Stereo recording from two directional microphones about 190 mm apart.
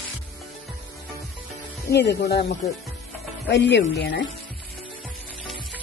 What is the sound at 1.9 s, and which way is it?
Speech, 60° left (ahead or behind).